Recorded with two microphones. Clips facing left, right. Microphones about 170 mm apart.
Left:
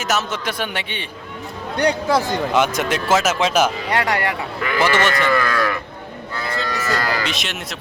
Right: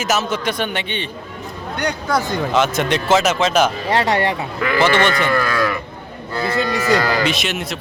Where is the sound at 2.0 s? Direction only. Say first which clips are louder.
Left 1 dB; 5° left (ahead or behind).